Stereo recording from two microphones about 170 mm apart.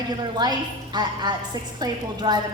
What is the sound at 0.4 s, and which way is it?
A woman's voice, 25° right (ahead or behind).